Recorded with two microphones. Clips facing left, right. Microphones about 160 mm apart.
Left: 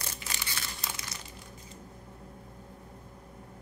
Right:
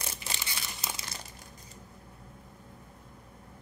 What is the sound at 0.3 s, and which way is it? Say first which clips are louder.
Crumpling: left 1 dB; 20° right (ahead or behind).